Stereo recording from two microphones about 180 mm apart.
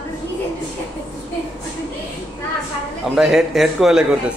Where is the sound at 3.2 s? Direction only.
5° right (ahead or behind).